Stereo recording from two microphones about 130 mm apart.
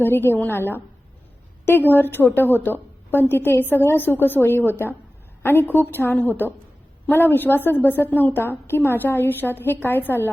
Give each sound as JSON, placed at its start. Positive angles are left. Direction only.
{"t": 0.0, "sound": "a woman's voice", "side_deg": 15}